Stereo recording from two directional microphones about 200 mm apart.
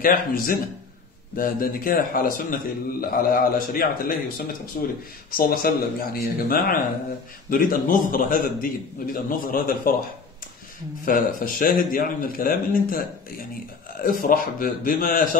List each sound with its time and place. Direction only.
0.0 s a man's voice: 45° left (ahead or behind)
11.1 s a man's voice: 40° left (ahead or behind)